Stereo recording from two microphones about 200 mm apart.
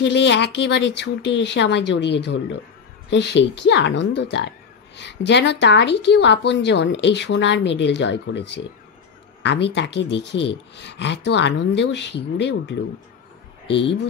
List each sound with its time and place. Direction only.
0.0 s a woman's voice: 60° left (ahead or behind)